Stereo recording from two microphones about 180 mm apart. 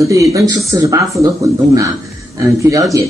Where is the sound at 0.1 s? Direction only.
20° right (ahead or behind).